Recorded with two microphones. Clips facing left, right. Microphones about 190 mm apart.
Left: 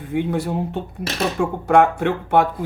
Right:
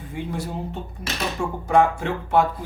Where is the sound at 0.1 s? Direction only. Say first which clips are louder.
Left 8 dB; 60° left (ahead or behind).